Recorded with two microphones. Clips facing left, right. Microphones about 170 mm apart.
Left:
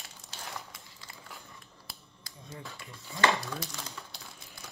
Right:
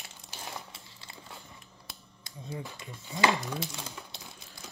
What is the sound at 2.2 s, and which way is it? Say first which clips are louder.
Speech: right 6 dB; 20° right (ahead or behind).